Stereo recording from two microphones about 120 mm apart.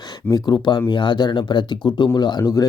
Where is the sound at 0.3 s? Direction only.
35° left (ahead or behind).